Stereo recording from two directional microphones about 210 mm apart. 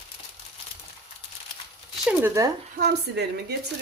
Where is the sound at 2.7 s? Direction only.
50° right (ahead or behind).